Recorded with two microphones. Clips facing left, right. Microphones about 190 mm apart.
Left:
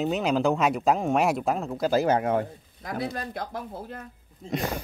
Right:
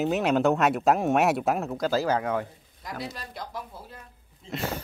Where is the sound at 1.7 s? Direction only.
15° left (ahead or behind).